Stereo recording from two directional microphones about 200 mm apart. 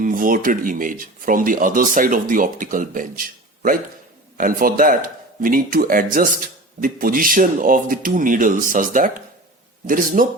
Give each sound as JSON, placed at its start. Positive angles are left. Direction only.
{"t": 0.0, "sound": "speech", "side_deg": -45}